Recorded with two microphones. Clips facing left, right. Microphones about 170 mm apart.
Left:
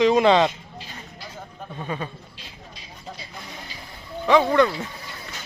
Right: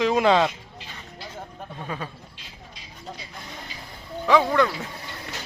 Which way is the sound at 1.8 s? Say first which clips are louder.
Left 3 dB; centre (ahead or behind).